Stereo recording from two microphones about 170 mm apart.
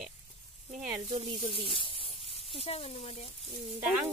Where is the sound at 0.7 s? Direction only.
10° right (ahead or behind).